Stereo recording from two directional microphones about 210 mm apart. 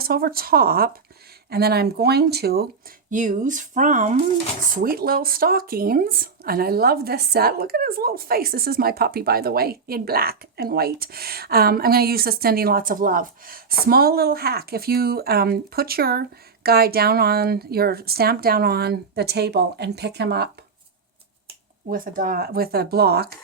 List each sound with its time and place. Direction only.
0.0 s speech: 45° right (ahead or behind)
3.1 s speech: 35° right (ahead or behind)
21.8 s speech: 40° right (ahead or behind)